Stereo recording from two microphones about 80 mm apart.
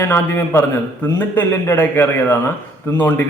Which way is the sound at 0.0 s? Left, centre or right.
Left.